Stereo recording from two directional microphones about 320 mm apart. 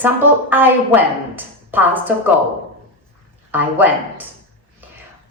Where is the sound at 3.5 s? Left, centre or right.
Centre.